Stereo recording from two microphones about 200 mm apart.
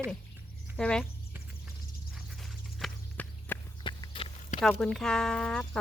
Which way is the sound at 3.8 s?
25° left (ahead or behind).